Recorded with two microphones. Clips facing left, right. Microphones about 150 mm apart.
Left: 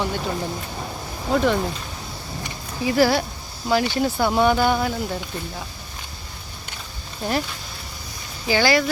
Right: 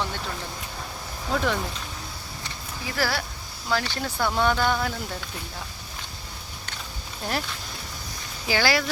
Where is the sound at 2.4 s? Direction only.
20° left (ahead or behind).